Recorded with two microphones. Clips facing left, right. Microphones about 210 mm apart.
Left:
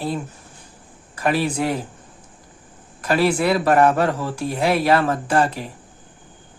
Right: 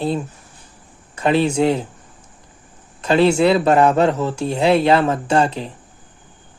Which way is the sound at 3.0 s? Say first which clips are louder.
Right 5 dB; 25° right (ahead or behind).